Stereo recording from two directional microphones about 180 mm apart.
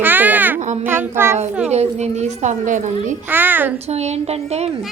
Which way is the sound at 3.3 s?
10° right (ahead or behind).